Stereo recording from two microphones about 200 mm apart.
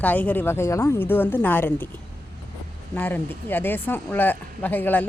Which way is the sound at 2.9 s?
10° left (ahead or behind).